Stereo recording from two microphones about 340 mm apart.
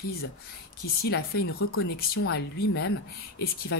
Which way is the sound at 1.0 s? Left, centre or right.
Left.